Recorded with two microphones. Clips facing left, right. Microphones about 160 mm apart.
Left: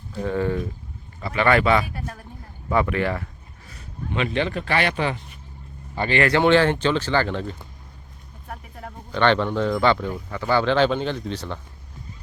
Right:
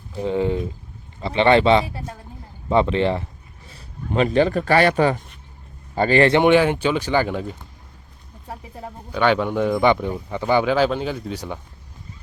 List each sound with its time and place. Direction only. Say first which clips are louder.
0.2 s speech: right 2 dB; 20° right (ahead or behind)
3.7 s speech: right 3 dB; 35° right (ahead or behind)
6.2 s speech: even; 20° right (ahead or behind)
8.4 s a sound: right 3 dB; 20° right (ahead or behind)
9.1 s speech: right 1 dB; 10° right (ahead or behind)